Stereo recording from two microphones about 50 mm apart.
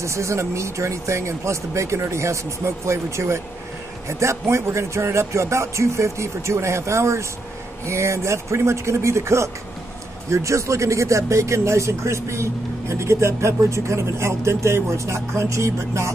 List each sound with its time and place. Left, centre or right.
0.0 s speech: right
10.3 s speech: right